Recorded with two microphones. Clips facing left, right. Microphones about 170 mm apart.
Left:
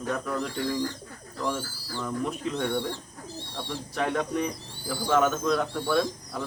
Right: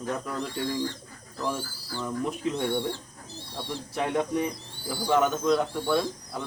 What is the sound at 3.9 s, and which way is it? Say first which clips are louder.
Speech: right 1 dB; 15° right (ahead or behind).